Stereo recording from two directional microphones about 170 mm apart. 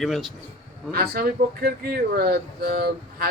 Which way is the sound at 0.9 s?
65° right (ahead or behind).